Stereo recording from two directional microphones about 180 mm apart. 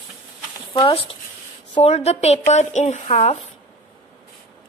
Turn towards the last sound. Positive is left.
turn(degrees=35)  # may be behind; listen again after turning